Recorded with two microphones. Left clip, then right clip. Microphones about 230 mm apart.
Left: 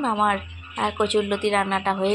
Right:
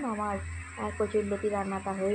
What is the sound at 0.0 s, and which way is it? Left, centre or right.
Speech, left.